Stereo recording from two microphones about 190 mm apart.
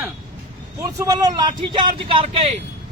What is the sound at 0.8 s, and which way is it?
Speech, 20° right (ahead or behind).